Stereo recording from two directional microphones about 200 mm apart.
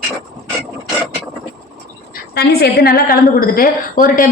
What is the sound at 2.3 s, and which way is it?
A woman's voice, 50° left (ahead or behind).